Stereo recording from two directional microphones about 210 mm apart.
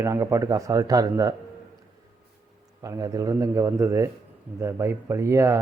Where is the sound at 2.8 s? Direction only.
15° right (ahead or behind).